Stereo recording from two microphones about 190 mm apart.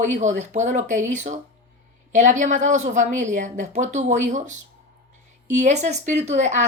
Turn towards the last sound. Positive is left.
turn(degrees=-40)  # may be behind; listen again after turning